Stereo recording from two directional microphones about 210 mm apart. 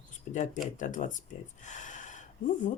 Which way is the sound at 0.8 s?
35° left (ahead or behind).